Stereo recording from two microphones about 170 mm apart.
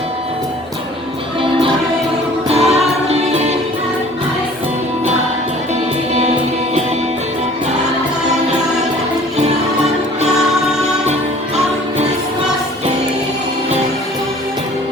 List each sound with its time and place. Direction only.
2.5 s music: 35° right (ahead or behind)